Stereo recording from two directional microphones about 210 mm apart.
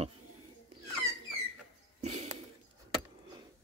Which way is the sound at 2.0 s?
35° right (ahead or behind).